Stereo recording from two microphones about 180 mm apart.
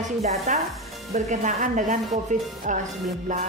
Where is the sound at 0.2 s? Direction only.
40° right (ahead or behind).